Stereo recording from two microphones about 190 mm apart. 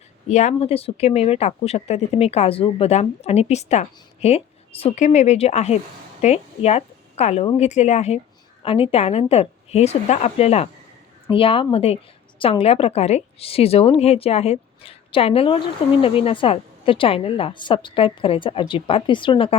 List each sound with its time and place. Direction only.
0.3 s a woman's voice: 40° left (ahead or behind)